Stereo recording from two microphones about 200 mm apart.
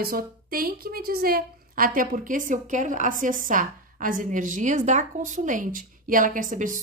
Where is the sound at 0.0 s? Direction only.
45° right (ahead or behind).